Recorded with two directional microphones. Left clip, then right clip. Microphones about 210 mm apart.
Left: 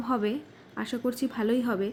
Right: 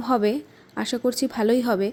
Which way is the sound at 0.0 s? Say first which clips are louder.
Right 7 dB; 35° right (ahead or behind).